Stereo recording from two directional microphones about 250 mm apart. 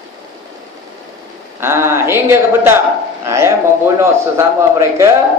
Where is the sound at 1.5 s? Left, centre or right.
Centre.